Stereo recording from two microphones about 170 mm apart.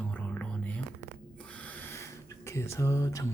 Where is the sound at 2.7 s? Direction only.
15° left (ahead or behind).